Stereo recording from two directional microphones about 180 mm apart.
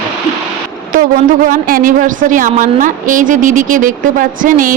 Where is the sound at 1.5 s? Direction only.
50° right (ahead or behind).